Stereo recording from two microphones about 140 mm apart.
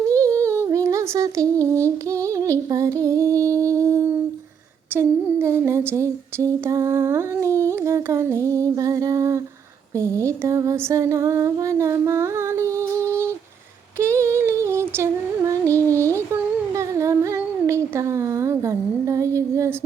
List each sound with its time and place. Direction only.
0.1 s a sound: 20° right (ahead or behind)
1.6 s female singing: 20° right (ahead or behind)
4.9 s humming: 20° right (ahead or behind)
9.9 s speech: 20° right (ahead or behind)
10.2 s female singing: 20° right (ahead or behind)
14.0 s music: 20° right (ahead or behind)
16.3 s humming: 20° right (ahead or behind)